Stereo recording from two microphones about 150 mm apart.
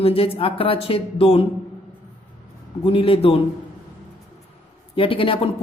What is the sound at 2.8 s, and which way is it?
Speech, 35° left (ahead or behind).